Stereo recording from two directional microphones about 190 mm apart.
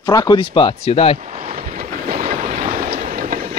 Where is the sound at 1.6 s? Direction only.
45° right (ahead or behind).